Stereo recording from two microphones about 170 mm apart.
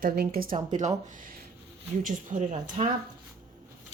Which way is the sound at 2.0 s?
45° right (ahead or behind).